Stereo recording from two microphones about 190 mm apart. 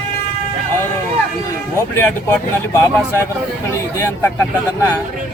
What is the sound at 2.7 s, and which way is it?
Speech, 15° left (ahead or behind).